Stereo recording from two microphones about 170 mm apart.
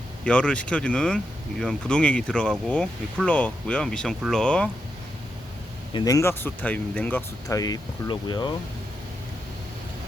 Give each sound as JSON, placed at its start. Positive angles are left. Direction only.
{"t": 0.3, "sound": "speech", "side_deg": 5}
{"t": 5.9, "sound": "speech", "side_deg": 20}